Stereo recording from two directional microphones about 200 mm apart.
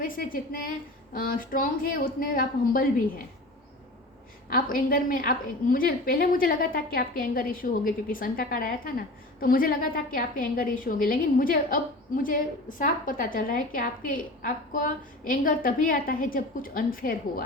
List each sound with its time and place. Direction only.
0.0 s a woman's voice: 45° left (ahead or behind)
4.4 s a woman's voice: 45° left (ahead or behind)